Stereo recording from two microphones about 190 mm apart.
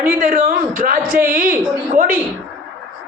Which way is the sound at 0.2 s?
45° right (ahead or behind).